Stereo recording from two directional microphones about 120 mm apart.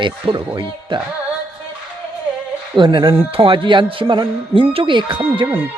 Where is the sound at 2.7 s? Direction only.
40° right (ahead or behind).